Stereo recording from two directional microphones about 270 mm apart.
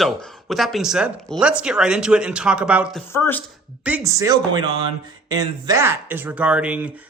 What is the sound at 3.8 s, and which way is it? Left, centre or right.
A man's voice, centre.